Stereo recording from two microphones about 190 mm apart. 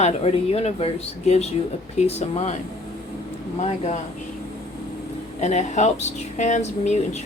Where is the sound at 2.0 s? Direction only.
35° left (ahead or behind).